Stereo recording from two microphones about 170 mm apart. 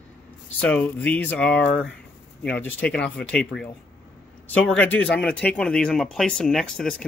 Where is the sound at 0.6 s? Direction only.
10° left (ahead or behind).